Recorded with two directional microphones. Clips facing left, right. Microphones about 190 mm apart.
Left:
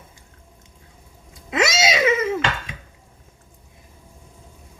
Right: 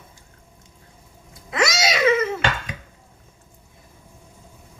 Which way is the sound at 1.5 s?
25° left (ahead or behind).